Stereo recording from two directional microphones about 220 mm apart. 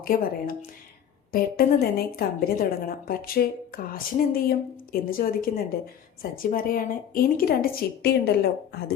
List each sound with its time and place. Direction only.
0.0 s a woman's voice: 40° left (ahead or behind)